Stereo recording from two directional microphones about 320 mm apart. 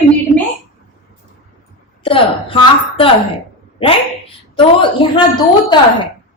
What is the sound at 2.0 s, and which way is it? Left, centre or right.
A woman's voice, centre.